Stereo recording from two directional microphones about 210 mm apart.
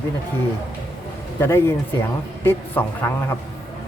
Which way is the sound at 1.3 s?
10° left (ahead or behind).